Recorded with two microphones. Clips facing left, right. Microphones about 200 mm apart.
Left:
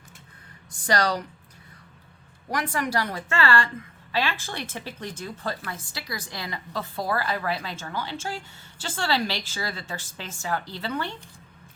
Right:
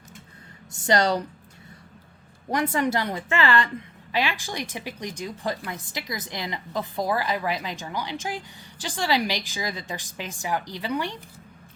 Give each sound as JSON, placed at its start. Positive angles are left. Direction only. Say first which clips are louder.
{"t": 0.9, "sound": "a woman's voice", "louder": "right 3 dB", "side_deg": -20}
{"t": 2.5, "sound": "a woman's voice", "louder": "right 4 dB", "side_deg": -25}